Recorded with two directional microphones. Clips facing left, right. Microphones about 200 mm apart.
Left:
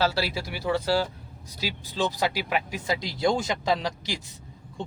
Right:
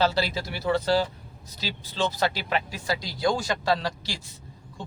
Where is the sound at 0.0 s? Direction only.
5° left (ahead or behind).